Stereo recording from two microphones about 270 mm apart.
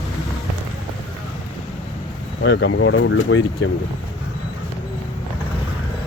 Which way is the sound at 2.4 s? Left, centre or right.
Left.